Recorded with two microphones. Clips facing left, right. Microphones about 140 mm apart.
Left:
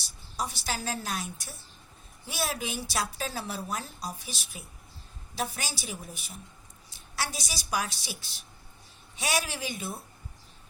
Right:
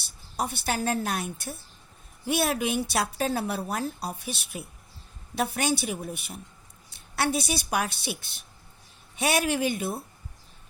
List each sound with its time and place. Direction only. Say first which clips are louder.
0.3 s speech: right 5 dB; 60° right (ahead or behind)